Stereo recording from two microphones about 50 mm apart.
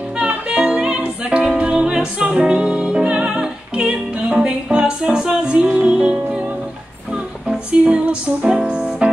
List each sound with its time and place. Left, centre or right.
0.2 s music: right
0.7 s music: centre
7.4 s music: right